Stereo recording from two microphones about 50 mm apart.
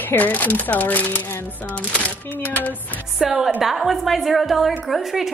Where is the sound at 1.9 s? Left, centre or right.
Left.